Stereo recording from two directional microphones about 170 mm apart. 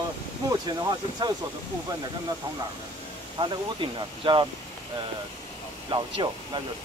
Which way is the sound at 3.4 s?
30° right (ahead or behind).